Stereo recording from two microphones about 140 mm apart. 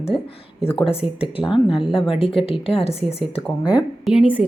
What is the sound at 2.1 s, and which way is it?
Speech, 40° left (ahead or behind).